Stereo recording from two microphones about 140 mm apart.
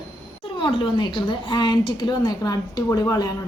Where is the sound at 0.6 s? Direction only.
35° left (ahead or behind).